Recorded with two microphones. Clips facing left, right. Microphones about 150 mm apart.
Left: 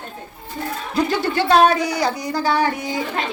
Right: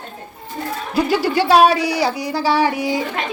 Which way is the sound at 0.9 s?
10° right (ahead or behind).